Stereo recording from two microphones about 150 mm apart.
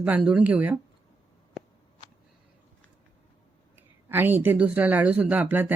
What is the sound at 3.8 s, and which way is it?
Speech, 15° right (ahead or behind).